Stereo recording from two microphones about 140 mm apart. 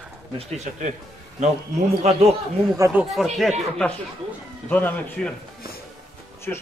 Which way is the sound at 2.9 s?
Centre (ahead or behind).